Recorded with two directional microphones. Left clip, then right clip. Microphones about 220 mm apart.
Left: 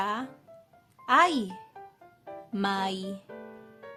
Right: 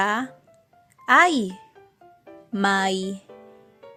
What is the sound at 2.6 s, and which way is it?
Speech, 25° right (ahead or behind).